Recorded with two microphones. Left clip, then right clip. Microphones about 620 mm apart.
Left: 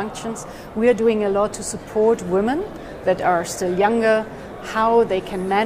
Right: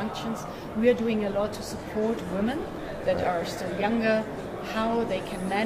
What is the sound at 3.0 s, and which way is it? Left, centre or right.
A woman's voice, left.